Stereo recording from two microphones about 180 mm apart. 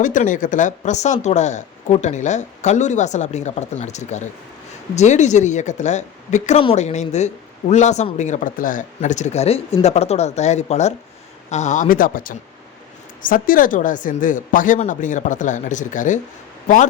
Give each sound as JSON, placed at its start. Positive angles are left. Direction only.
{"t": 0.0, "sound": "speech", "side_deg": 45}